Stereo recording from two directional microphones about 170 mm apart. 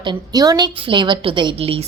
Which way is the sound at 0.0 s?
25° right (ahead or behind).